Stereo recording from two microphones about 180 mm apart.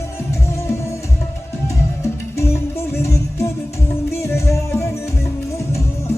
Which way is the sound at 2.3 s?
15° left (ahead or behind).